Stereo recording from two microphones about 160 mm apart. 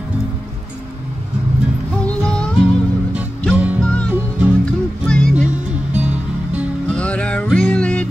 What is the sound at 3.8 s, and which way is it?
Music, 10° left (ahead or behind).